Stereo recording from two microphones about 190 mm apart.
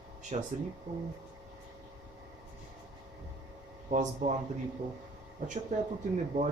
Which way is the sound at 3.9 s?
40° right (ahead or behind).